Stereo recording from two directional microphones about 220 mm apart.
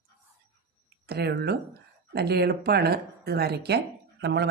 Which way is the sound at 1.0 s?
45° right (ahead or behind).